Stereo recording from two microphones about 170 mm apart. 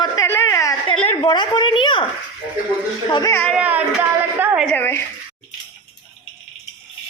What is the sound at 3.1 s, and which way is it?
Speech, 20° left (ahead or behind).